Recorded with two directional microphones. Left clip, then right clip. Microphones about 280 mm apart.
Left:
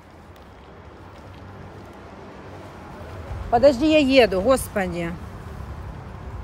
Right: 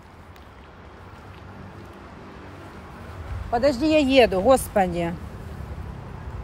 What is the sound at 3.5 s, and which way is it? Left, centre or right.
Speech, centre.